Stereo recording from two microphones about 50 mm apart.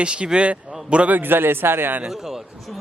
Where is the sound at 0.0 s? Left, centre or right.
Right.